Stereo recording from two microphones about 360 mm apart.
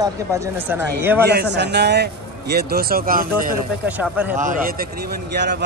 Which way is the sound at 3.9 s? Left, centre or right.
Centre.